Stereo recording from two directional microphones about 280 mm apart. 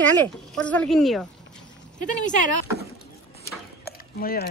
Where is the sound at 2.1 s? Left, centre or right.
Left.